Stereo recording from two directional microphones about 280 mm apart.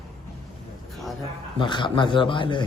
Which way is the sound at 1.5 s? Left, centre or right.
Centre.